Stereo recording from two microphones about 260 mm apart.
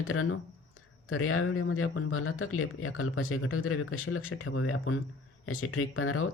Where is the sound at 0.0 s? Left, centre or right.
Left.